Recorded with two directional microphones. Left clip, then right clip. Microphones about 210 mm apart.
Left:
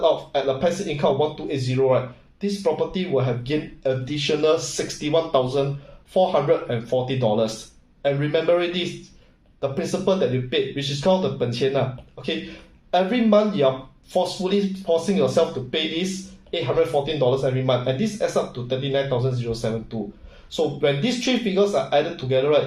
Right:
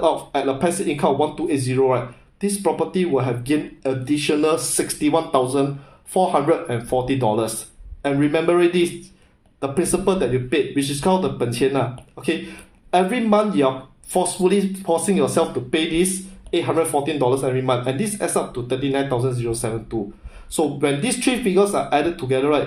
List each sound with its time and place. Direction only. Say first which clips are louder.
0.0 s speech: right 1 dB; 50° right (ahead or behind)